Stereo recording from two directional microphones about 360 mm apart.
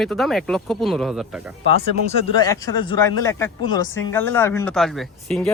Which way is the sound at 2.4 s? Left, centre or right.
Centre.